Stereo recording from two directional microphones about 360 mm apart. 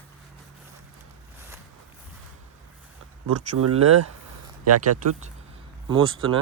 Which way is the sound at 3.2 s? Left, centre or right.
Right.